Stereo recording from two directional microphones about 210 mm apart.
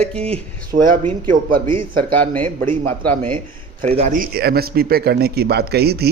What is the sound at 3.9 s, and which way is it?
Speech, 30° right (ahead or behind).